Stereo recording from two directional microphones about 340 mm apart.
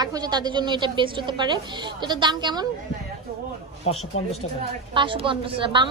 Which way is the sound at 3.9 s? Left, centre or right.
Centre.